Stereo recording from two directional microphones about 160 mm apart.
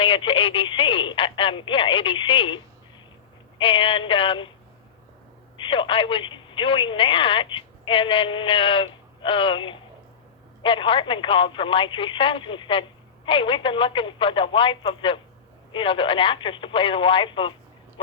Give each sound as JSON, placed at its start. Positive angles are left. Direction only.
{"t": 0.0, "sound": "speech", "side_deg": 30}
{"t": 3.6, "sound": "speech", "side_deg": 35}
{"t": 5.5, "sound": "speech", "side_deg": 30}